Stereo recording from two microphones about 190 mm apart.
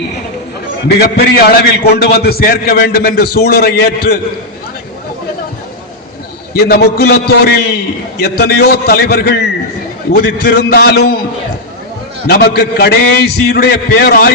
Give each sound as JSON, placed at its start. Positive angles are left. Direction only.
{"t": 0.9, "sound": "a man's voice", "side_deg": 55}
{"t": 6.5, "sound": "a man's voice", "side_deg": 55}
{"t": 12.3, "sound": "a man's voice", "side_deg": 55}